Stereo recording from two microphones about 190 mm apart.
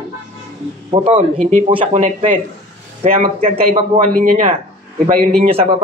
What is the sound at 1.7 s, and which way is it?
Speech, 30° right (ahead or behind).